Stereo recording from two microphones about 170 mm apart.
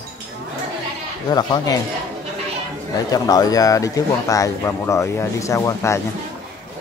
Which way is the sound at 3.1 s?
20° left (ahead or behind).